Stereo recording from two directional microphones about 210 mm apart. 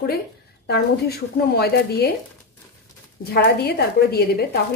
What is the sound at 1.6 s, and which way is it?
Speech, 50° left (ahead or behind).